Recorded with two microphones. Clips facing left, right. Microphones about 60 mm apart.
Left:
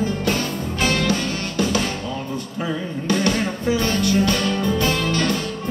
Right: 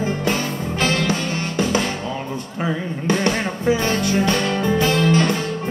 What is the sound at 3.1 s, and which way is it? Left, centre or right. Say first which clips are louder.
Music: even; right.